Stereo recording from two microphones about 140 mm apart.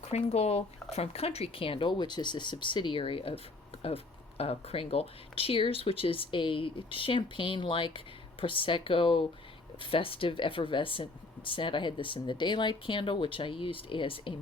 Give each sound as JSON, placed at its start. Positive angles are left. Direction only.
{"t": 0.1, "sound": "speech", "side_deg": 50}